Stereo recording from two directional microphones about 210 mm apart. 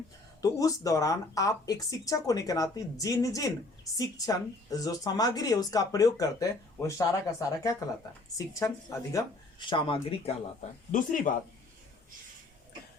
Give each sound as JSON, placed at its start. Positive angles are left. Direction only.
{"t": 0.4, "sound": "speech", "side_deg": 15}